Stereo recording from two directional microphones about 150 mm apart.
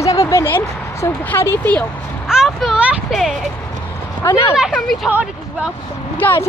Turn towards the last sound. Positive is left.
turn(degrees=10)  # may be behind; listen again after turning